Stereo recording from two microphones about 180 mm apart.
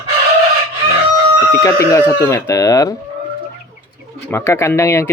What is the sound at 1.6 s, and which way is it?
Speech, 15° left (ahead or behind).